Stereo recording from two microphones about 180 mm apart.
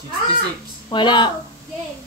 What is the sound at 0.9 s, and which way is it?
Speech, 25° left (ahead or behind).